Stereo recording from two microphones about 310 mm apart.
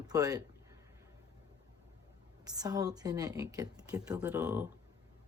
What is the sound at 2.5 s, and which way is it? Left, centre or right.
Speech, centre.